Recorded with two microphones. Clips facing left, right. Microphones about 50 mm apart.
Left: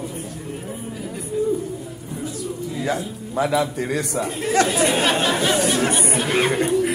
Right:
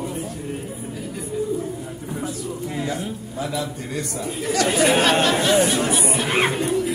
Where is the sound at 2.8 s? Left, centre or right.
Left.